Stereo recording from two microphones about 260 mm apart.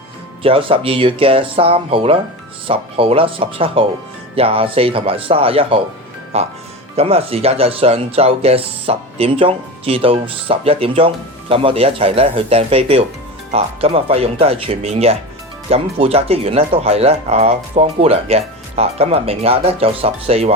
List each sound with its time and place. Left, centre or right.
0.4 s speech: right